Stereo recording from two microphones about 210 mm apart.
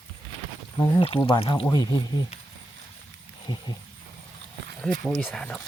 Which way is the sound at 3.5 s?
25° left (ahead or behind).